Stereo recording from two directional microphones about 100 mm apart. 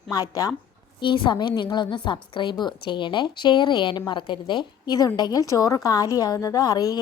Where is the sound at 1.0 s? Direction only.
55° left (ahead or behind).